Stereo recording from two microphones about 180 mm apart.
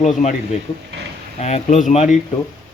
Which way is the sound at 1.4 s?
40° left (ahead or behind).